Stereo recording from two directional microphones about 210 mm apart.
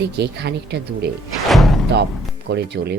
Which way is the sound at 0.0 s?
55° right (ahead or behind).